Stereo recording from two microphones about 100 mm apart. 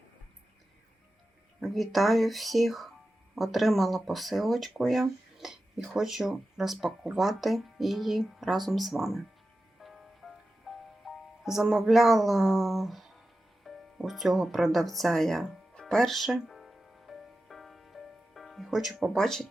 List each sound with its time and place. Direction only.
1.6 s speech: centre (ahead or behind)
9.8 s music: centre (ahead or behind)